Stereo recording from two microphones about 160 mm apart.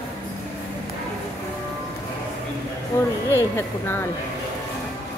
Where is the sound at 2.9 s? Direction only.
15° left (ahead or behind).